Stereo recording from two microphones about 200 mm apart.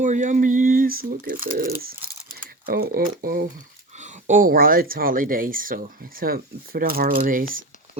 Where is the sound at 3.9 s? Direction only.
35° right (ahead or behind).